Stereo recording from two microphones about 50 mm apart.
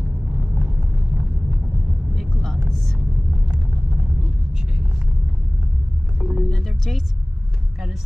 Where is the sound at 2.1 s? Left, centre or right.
Centre.